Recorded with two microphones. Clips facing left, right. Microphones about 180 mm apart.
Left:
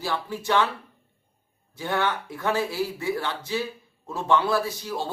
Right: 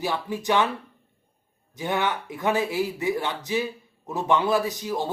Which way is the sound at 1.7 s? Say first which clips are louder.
Even; 15° right (ahead or behind).